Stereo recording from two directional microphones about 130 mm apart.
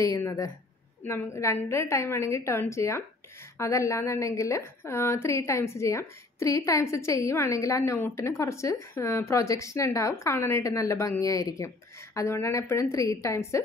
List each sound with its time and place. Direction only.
0.0 s a woman's voice: 25° left (ahead or behind)